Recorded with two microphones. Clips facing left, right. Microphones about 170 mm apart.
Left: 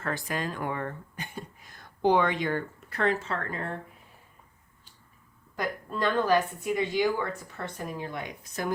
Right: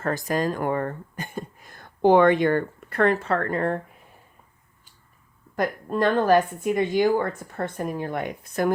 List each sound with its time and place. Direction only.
0.0 s speech: 40° right (ahead or behind); by 3.8 s 60° right (ahead or behind)
5.5 s speech: 50° right (ahead or behind)